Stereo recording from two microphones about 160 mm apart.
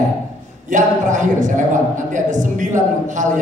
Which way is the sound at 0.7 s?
50° right (ahead or behind).